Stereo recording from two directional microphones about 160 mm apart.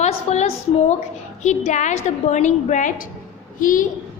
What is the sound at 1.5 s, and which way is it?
A woman's voice, 50° left (ahead or behind).